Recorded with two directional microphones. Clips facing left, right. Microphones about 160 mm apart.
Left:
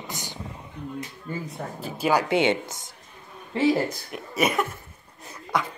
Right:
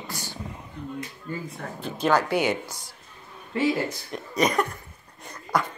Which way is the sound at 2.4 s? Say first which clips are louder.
Left 2 dB; 25° left (ahead or behind).